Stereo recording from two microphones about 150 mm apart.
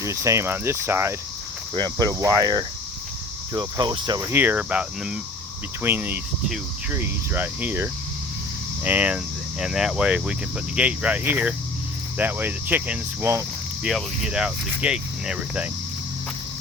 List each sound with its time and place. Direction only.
0.0 s speech: 20° right (ahead or behind)
1.7 s speech: 25° right (ahead or behind)
4.3 s speech: 10° right (ahead or behind)